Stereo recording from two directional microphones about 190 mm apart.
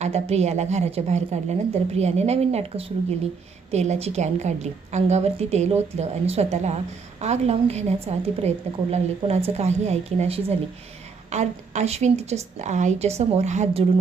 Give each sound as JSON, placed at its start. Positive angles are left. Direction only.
{"t": 0.0, "sound": "a woman's voice", "side_deg": -35}